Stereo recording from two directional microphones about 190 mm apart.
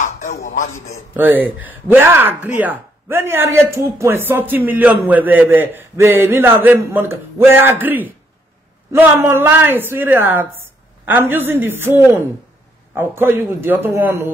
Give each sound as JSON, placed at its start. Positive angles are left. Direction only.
{"t": 0.0, "sound": "music", "side_deg": 40}
{"t": 1.1, "sound": "speech", "side_deg": -10}